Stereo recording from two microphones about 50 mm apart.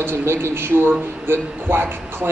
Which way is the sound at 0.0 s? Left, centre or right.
Right.